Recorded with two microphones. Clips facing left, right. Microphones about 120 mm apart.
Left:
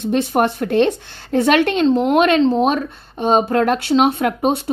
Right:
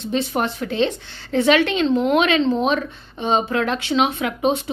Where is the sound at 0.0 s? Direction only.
50° left (ahead or behind).